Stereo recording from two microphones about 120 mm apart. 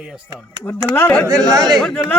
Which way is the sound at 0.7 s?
15° left (ahead or behind).